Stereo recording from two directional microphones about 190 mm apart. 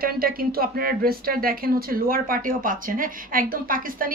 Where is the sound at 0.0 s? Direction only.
50° right (ahead or behind).